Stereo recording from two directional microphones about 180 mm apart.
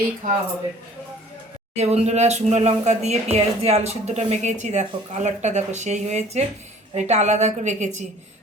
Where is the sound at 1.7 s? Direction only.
35° right (ahead or behind).